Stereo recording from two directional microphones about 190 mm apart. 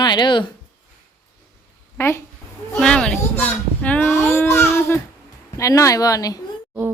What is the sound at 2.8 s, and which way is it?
Babbling, 5° left (ahead or behind).